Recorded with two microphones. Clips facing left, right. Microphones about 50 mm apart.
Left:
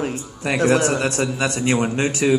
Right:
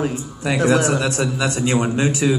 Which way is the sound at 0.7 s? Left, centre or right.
Left.